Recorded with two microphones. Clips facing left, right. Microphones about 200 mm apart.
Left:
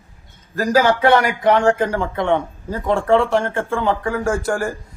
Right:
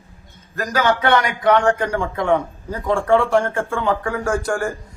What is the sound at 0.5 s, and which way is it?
Speech, 30° left (ahead or behind).